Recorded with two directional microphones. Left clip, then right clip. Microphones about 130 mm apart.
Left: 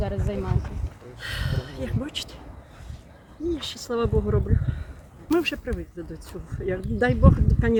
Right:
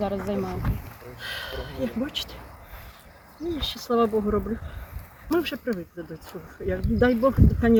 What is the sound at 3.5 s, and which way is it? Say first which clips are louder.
Speech: right 6 dB; 25° left (ahead or behind).